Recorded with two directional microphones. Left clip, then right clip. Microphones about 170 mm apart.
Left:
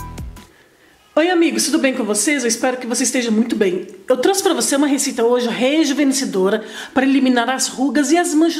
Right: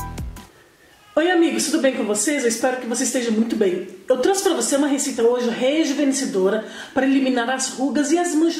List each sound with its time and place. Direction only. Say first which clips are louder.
1.1 s speech: left 3 dB; 30° left (ahead or behind)